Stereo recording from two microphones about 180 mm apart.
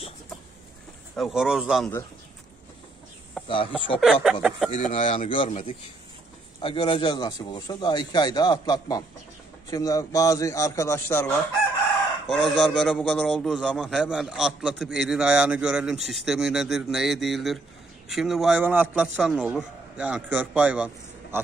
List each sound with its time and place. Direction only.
1.1 s a man's voice: centre (ahead or behind)
3.4 s a sound: centre (ahead or behind)
4.0 s a man's voice: 5° right (ahead or behind)
4.7 s a man's voice: 30° left (ahead or behind); by 11.3 s 15° left (ahead or behind)
12.3 s a man's voice: centre (ahead or behind)